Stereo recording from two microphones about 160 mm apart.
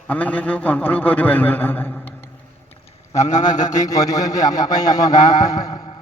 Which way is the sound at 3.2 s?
50° left (ahead or behind).